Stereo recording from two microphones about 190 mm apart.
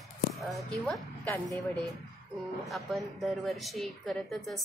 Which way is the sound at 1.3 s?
15° left (ahead or behind).